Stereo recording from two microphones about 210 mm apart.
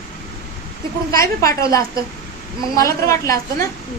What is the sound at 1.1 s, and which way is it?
A woman's voice, 15° left (ahead or behind).